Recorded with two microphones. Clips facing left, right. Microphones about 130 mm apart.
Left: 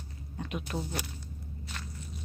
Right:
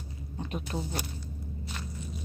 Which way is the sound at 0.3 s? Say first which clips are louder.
Right 1 dB; 30° right (ahead or behind).